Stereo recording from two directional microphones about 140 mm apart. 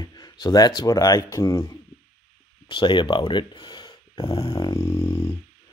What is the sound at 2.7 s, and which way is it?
Speech, 35° left (ahead or behind).